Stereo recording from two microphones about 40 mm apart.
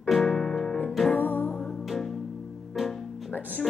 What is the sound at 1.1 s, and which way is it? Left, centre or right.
Music, left.